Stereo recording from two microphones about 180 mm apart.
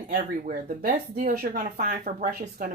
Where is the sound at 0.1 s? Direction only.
50° right (ahead or behind).